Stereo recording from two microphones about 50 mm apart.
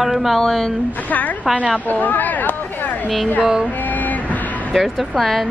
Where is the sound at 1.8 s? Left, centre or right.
Left.